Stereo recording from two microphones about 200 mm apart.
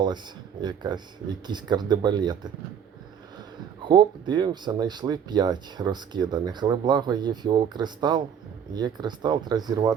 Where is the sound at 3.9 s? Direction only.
20° right (ahead or behind).